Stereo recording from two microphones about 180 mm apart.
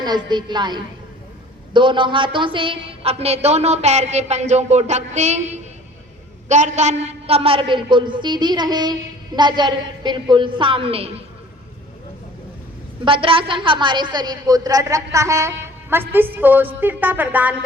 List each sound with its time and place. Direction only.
0.0 s a woman's voice: 25° right (ahead or behind)
13.1 s a woman's voice: 30° right (ahead or behind); by 17.5 s 10° right (ahead or behind)